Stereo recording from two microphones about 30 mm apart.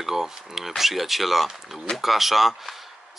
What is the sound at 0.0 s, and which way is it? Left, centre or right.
Speech, centre.